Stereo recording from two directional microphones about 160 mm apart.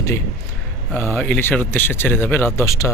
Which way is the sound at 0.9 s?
15° left (ahead or behind).